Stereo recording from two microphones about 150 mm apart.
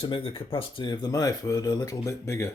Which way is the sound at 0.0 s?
35° left (ahead or behind).